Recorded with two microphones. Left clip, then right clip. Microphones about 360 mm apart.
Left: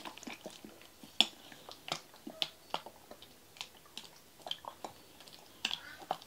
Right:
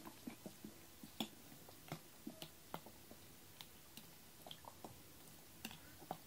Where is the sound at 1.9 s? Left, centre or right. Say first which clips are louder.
Left 13 dB; centre.